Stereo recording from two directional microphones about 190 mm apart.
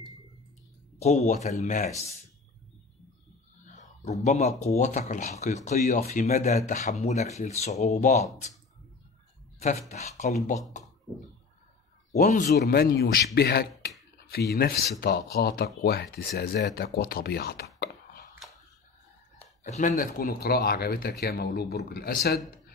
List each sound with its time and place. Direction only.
0.9 s speech: 35° left (ahead or behind)
3.6 s speech: 40° left (ahead or behind)
9.8 s speech: 35° left (ahead or behind)
12.2 s speech: 45° left (ahead or behind)
19.6 s speech: 40° left (ahead or behind); by 22.4 s 55° left (ahead or behind)